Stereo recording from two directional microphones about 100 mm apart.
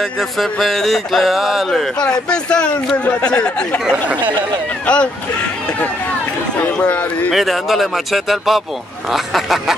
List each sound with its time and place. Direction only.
0.0 s a sound: centre (ahead or behind)
2.2 s speech: 10° left (ahead or behind)
4.2 s speech: 50° right (ahead or behind)
4.8 s speech: 10° left (ahead or behind)
6.6 s speech: 15° left (ahead or behind)
7.3 s a sound: centre (ahead or behind)